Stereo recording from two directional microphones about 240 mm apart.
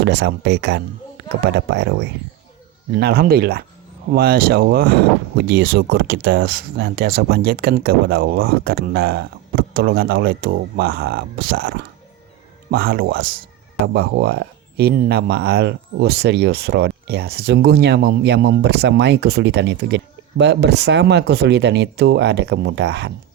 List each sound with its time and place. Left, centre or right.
0.0 s speech: right